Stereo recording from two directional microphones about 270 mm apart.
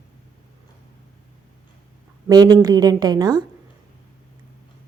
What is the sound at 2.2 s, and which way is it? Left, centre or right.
A woman's voice, centre.